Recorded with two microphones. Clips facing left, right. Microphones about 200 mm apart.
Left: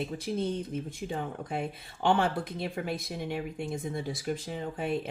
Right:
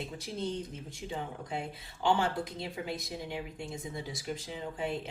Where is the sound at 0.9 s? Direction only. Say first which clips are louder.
Left 4 dB; 55° left (ahead or behind).